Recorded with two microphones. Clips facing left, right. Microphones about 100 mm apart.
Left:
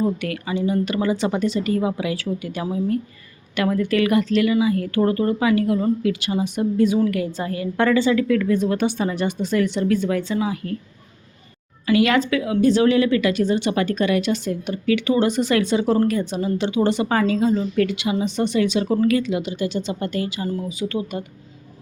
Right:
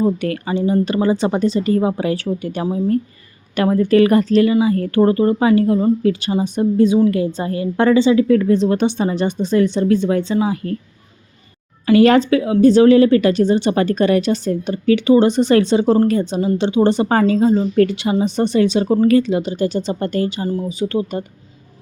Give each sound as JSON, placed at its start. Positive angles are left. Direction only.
{"t": 0.2, "sound": "a woman's voice", "side_deg": -35}
{"t": 11.9, "sound": "speech", "side_deg": -35}